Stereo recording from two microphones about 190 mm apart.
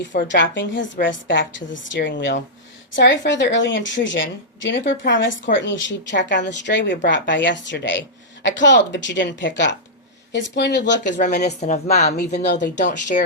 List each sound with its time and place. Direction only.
0.3 s a woman's voice: 70° left (ahead or behind)
11.2 s a woman's voice: 40° left (ahead or behind)
12.1 s speech: 60° left (ahead or behind)
13.1 s speech: 40° left (ahead or behind)